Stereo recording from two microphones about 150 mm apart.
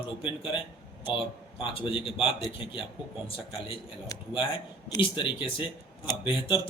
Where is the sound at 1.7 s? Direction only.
35° left (ahead or behind).